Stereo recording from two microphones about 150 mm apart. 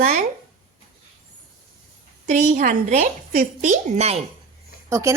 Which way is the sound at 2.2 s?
55° right (ahead or behind).